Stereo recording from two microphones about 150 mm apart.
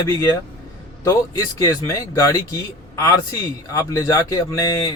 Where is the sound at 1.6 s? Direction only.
20° left (ahead or behind).